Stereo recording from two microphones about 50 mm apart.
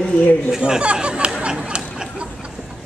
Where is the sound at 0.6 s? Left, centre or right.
Centre.